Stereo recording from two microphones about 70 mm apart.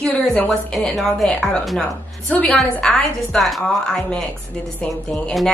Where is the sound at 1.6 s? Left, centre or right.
Centre.